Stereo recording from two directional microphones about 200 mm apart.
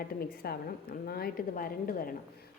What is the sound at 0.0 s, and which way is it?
A woman's voice, 50° left (ahead or behind).